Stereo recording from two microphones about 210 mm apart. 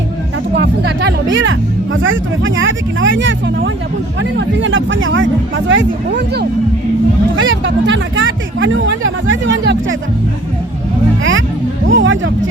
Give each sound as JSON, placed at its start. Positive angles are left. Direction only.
{"t": 0.5, "sound": "speech", "side_deg": -50}
{"t": 11.2, "sound": "speech", "side_deg": -65}